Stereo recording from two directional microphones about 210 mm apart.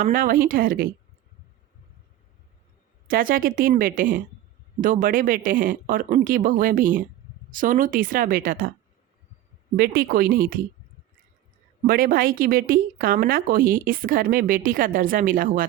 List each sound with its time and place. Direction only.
0.0 s speech: 40° right (ahead or behind)
3.1 s speech: 40° right (ahead or behind)
9.7 s speech: 45° right (ahead or behind)
11.9 s speech: 45° right (ahead or behind)